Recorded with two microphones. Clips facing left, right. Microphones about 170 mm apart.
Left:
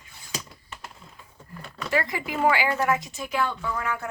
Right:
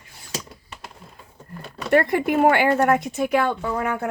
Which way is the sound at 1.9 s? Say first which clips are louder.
Right 9 dB; 55° right (ahead or behind).